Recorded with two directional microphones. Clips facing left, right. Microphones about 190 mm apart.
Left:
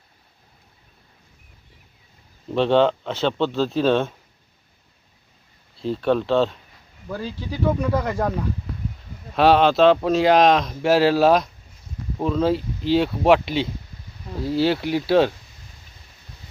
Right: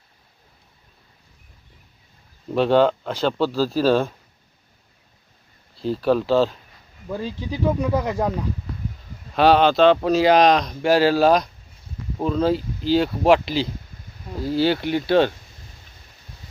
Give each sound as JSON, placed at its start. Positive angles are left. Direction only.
{"t": 2.5, "sound": "speech", "side_deg": -5}
{"t": 5.7, "sound": "speech", "side_deg": 0}
{"t": 7.1, "sound": "speech", "side_deg": -20}
{"t": 9.3, "sound": "speech", "side_deg": 0}